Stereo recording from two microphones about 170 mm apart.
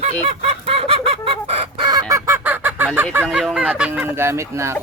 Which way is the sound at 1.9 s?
20° right (ahead or behind).